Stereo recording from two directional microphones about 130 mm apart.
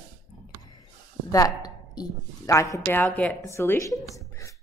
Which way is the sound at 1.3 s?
30° left (ahead or behind).